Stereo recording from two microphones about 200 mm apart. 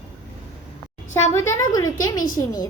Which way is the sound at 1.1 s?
15° left (ahead or behind).